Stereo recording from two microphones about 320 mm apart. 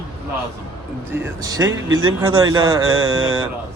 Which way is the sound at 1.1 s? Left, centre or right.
Centre.